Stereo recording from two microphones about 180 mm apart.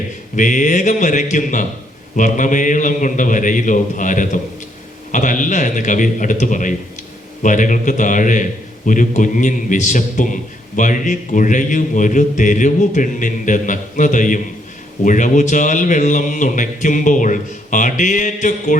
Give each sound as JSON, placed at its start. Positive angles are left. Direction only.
{"t": 0.3, "sound": "a man's voice", "side_deg": 45}